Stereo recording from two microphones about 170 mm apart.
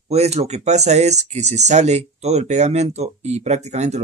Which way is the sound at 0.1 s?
40° right (ahead or behind).